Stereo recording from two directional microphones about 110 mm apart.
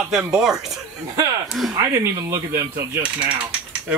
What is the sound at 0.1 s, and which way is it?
Speech, 5° right (ahead or behind).